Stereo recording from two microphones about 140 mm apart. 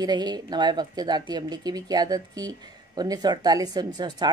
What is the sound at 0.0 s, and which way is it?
A woman's voice, 30° right (ahead or behind).